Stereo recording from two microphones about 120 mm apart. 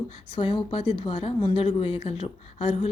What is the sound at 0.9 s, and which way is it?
Speech, 55° left (ahead or behind).